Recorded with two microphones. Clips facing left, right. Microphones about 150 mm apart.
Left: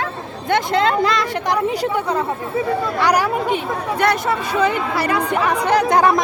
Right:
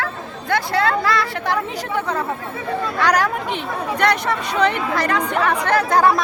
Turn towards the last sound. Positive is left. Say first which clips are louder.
# left 1 dB
turn(degrees=20)  # may be behind; listen again after turning